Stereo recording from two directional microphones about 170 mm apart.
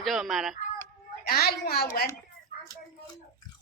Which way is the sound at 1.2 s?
65° left (ahead or behind).